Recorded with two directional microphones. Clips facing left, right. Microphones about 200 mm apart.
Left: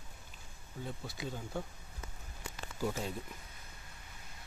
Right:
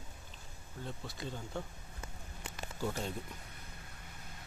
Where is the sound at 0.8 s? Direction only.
5° left (ahead or behind).